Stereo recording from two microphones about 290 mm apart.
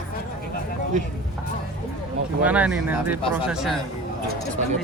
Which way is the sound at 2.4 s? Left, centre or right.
Centre.